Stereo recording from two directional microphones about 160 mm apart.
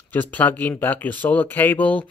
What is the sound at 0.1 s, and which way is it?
Speech, 10° left (ahead or behind).